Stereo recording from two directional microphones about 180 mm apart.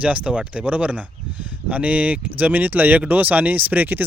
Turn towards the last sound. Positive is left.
turn(degrees=-10)  # may be behind; listen again after turning